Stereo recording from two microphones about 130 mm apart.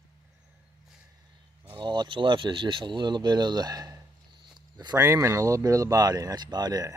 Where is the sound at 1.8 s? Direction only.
35° right (ahead or behind).